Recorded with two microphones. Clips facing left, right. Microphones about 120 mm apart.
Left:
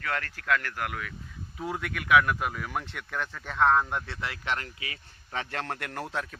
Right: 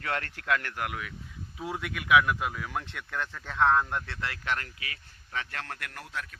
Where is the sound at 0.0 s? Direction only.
25° right (ahead or behind).